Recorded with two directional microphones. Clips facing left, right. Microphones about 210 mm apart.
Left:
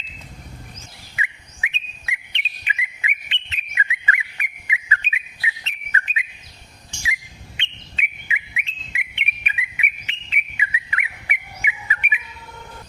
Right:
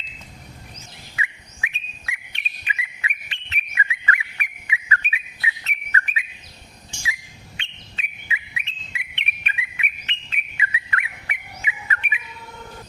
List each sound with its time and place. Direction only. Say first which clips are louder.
1.1 s bird: even; 20° left (ahead or behind)
9.1 s bird: right 1 dB; 10° left (ahead or behind)